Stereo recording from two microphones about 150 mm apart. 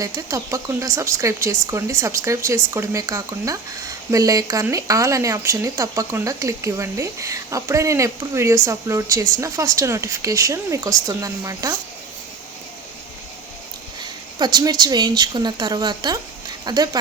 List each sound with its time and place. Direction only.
0.0 s speech: 20° right (ahead or behind)
14.0 s speech: 30° right (ahead or behind)